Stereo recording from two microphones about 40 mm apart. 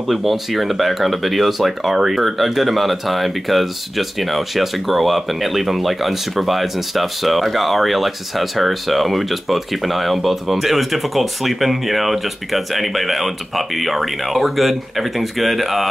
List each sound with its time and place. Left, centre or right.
0.1 s speech: centre